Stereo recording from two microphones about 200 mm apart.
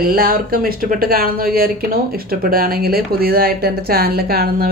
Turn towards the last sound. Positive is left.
turn(degrees=-50)  # may be behind; listen again after turning